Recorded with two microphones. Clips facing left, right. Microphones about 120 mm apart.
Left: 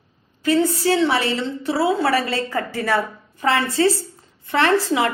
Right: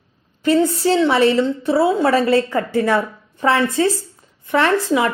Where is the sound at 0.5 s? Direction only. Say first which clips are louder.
Right 2 dB; 20° right (ahead or behind).